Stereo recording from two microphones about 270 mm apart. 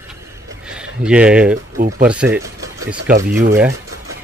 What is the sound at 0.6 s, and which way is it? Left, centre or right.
Speech, centre.